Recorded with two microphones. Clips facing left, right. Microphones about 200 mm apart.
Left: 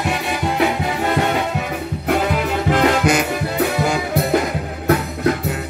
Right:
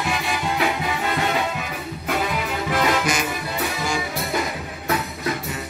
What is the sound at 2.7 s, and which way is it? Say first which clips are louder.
Music: left 6 dB; 60° left (ahead or behind).